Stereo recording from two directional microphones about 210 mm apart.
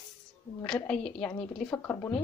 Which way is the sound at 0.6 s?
5° left (ahead or behind).